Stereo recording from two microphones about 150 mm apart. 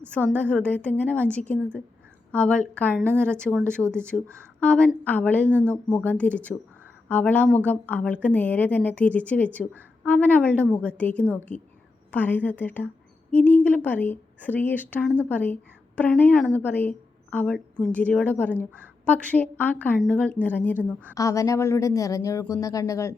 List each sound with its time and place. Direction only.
0.1 s a woman's voice: 10° left (ahead or behind)
3.0 s a woman's voice: 15° right (ahead or behind)
3.2 s a woman's voice: 5° left (ahead or behind)
21.2 s speech: 20° left (ahead or behind)